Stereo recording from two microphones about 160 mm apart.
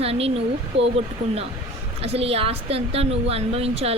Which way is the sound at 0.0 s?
40° right (ahead or behind).